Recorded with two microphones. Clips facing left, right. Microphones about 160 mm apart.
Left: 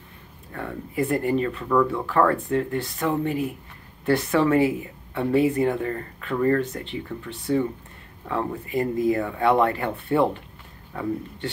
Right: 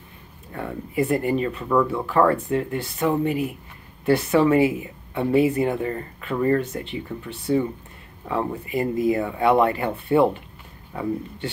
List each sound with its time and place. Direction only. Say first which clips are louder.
0.5 s speech: right 2 dB; 15° right (ahead or behind)